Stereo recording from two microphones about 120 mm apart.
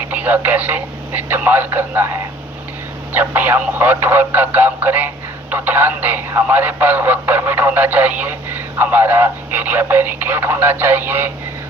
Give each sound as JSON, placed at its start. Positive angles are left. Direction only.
{"t": 0.1, "sound": "speech", "side_deg": -15}
{"t": 3.1, "sound": "speech", "side_deg": -15}